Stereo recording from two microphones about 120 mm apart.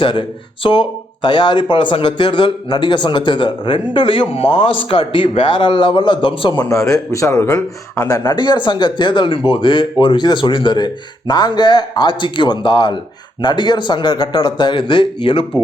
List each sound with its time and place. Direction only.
0.0 s speech: 45° left (ahead or behind)
6.7 s speech: 25° left (ahead or behind); by 15.4 s 40° left (ahead or behind)